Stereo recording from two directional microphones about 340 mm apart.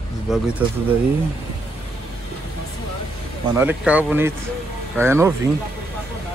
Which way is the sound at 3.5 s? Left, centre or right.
Centre.